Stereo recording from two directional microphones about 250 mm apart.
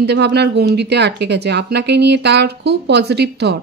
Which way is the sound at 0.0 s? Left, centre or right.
Right.